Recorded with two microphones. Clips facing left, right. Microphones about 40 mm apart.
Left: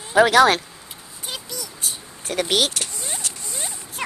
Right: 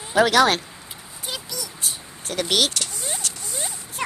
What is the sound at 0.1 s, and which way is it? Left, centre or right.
Speech, left.